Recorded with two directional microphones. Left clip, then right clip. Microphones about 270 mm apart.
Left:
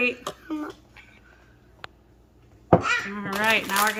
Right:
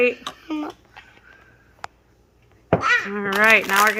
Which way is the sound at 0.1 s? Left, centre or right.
Right.